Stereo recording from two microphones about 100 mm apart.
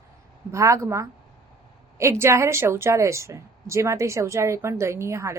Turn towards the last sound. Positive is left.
turn(degrees=-30)  # may be behind; listen again after turning